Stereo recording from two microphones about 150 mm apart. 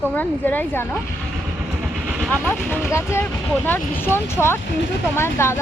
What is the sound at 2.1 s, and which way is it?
Vehicle, 5° right (ahead or behind).